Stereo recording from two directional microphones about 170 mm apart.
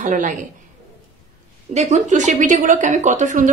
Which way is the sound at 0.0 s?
50° right (ahead or behind).